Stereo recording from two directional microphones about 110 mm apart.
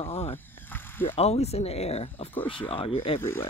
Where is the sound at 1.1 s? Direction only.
70° left (ahead or behind).